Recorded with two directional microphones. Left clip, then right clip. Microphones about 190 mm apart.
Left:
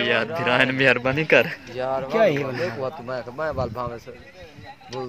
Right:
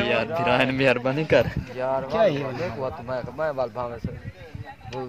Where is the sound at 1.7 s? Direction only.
50° left (ahead or behind); by 2.5 s 35° left (ahead or behind).